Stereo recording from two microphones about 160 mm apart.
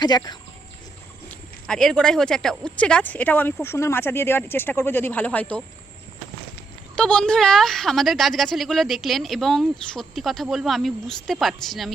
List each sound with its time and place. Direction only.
0.0 s speech: 25° left (ahead or behind)
1.3 s speech: 5° left (ahead or behind)
6.9 s a woman's voice: 5° left (ahead or behind)